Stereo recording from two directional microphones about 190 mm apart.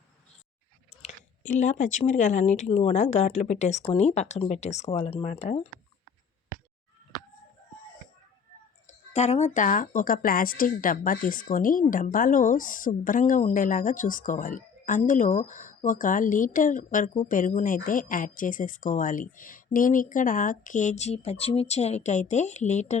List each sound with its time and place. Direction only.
1.0 s speech: 40° left (ahead or behind)
8.9 s speech: 35° left (ahead or behind)